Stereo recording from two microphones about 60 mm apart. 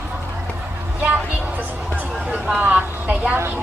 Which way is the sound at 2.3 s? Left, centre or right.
Centre.